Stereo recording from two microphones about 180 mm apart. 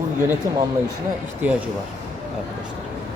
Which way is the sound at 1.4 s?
10° right (ahead or behind).